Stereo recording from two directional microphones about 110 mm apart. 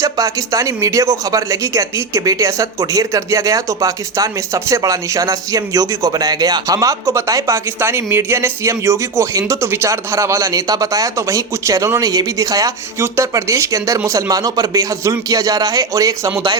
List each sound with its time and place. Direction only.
0.0 s speech: 30° right (ahead or behind)